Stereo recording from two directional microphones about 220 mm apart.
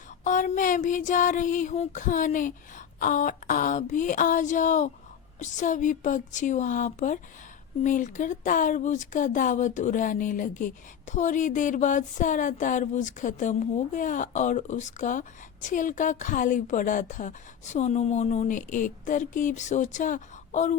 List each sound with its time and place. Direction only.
0.3 s speech: 35° left (ahead or behind)